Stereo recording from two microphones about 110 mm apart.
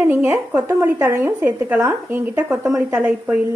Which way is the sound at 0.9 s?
25° right (ahead or behind).